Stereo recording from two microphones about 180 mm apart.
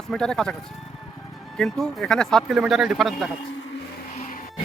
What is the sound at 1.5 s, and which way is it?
Speech, centre (ahead or behind).